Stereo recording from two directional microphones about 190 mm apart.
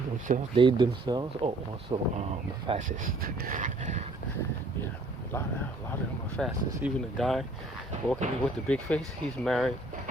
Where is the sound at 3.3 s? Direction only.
45° right (ahead or behind).